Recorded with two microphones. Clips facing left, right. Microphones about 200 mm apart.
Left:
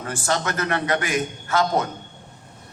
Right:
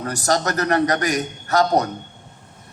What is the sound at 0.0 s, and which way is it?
A man's voice, 40° right (ahead or behind).